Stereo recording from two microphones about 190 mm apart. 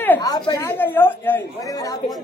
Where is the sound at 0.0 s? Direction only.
15° left (ahead or behind).